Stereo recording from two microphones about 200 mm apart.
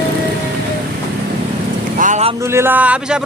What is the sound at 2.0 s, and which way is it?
Vehicle, 40° right (ahead or behind).